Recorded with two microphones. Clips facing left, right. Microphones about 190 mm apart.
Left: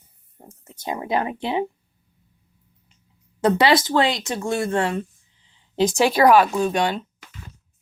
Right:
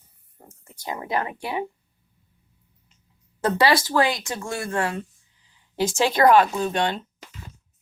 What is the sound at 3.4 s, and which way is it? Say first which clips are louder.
A woman's voice: left 3 dB; 20° left (ahead or behind).